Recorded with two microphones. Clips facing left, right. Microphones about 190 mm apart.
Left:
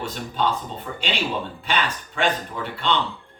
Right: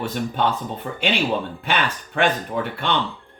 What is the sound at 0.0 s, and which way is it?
Speech, 55° right (ahead or behind).